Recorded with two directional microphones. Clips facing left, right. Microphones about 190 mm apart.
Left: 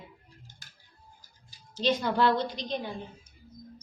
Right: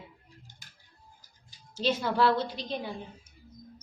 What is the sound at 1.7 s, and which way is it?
A woman's voice, 5° right (ahead or behind).